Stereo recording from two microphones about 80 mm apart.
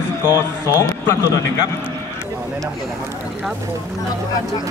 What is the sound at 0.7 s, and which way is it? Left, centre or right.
Speech, left.